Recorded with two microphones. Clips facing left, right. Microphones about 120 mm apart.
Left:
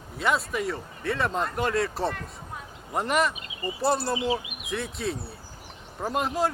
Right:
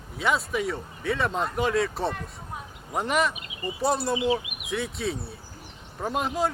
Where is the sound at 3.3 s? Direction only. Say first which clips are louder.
Even; 30° left (ahead or behind).